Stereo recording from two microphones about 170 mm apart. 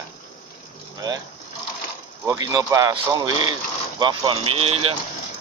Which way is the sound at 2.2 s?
20° right (ahead or behind).